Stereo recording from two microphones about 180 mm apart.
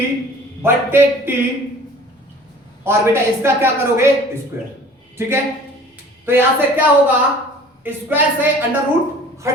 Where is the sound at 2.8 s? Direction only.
15° right (ahead or behind).